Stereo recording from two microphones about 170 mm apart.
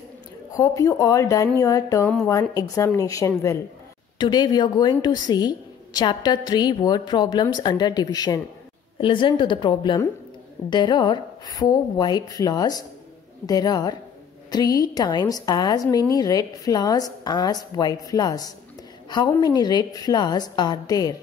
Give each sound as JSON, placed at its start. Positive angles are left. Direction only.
{"t": 0.6, "sound": "a woman's voice", "side_deg": 20}